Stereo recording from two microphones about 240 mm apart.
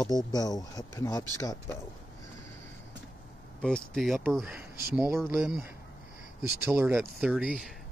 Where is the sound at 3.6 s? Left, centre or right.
Centre.